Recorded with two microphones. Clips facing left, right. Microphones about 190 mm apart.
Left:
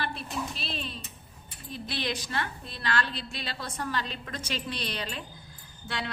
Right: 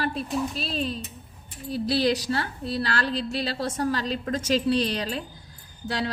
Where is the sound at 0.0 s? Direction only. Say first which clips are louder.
Right 7 dB; 40° right (ahead or behind).